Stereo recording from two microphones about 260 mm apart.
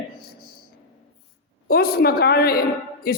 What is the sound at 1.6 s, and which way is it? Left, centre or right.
A man's voice, left.